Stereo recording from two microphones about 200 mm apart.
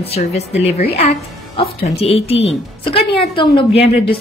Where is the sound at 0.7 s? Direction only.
30° left (ahead or behind).